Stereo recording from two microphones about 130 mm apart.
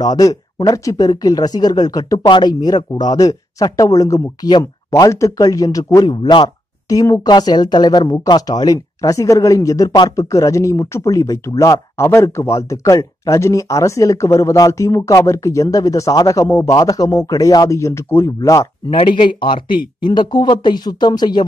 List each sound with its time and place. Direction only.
0.0 s speech: 30° left (ahead or behind)
18.9 s speech: 40° left (ahead or behind)